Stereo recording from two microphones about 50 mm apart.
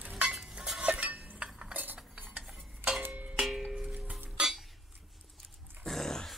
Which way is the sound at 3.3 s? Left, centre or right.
Centre.